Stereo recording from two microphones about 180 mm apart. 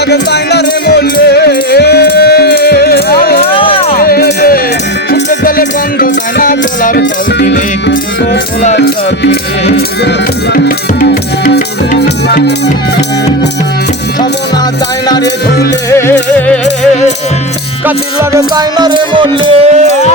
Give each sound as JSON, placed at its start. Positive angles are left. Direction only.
{"t": 0.1, "sound": "music", "side_deg": 65}
{"t": 3.5, "sound": "a sound", "side_deg": 30}
{"t": 3.9, "sound": "music", "side_deg": 55}
{"t": 7.0, "sound": "music", "side_deg": 65}
{"t": 8.7, "sound": "music", "side_deg": 65}
{"t": 11.9, "sound": "music", "side_deg": 70}
{"t": 15.2, "sound": "music", "side_deg": 60}
{"t": 15.9, "sound": "music", "side_deg": 15}
{"t": 17.8, "sound": "music", "side_deg": -15}